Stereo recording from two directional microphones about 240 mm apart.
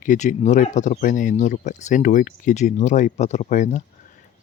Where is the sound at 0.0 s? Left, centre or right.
Left.